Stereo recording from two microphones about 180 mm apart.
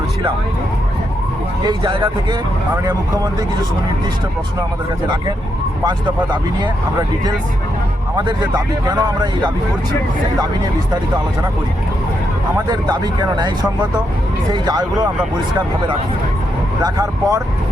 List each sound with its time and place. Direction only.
1.6 s speech: 25° right (ahead or behind)
5.8 s speech: 25° right (ahead or behind)
8.1 s speech: 20° right (ahead or behind)
12.6 s speech: 25° right (ahead or behind)
14.5 s speech: 25° right (ahead or behind)
16.8 s speech: 20° right (ahead or behind)